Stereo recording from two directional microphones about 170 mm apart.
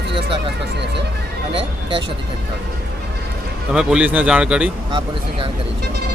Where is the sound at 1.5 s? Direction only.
30° right (ahead or behind).